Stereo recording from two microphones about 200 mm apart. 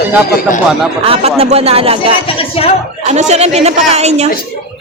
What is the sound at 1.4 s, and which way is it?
A woman's voice, 30° right (ahead or behind).